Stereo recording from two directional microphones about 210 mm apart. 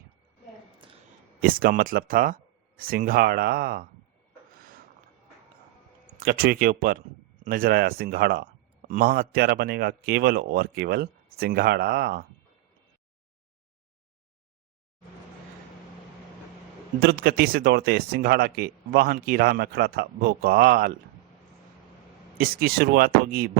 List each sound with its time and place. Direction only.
1.4 s speech: 45° right (ahead or behind)
6.1 s speech: 45° right (ahead or behind)
17.0 s speech: 45° right (ahead or behind)
22.4 s speech: 45° right (ahead or behind)